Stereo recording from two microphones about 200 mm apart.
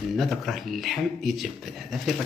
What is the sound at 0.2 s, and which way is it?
Speech, centre (ahead or behind).